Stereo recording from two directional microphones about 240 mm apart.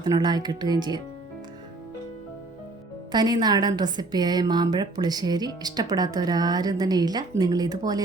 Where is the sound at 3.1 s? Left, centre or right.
Centre.